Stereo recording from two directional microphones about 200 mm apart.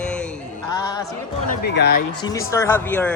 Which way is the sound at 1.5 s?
50° left (ahead or behind).